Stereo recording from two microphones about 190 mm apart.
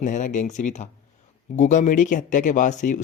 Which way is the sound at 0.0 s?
40° left (ahead or behind).